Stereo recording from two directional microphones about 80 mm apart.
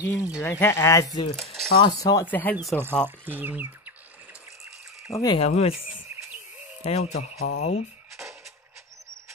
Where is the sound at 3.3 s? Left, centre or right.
Right.